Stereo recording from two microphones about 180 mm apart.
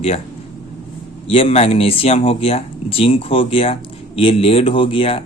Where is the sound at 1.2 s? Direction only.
30° left (ahead or behind).